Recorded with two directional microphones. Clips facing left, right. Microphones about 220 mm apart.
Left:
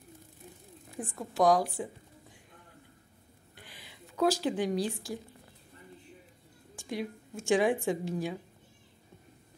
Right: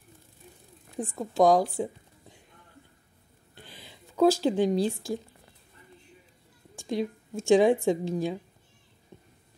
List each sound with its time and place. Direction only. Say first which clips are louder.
0.9 s a woman's voice: right 6 dB; 25° right (ahead or behind)
3.5 s a sound: right 4 dB; 25° right (ahead or behind)
4.6 s a woman's voice: right 6 dB; 25° right (ahead or behind)
6.9 s a woman's voice: right 6 dB; 25° right (ahead or behind)